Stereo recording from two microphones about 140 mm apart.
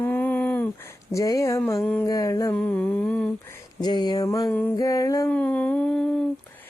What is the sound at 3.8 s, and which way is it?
Speech, 30° left (ahead or behind).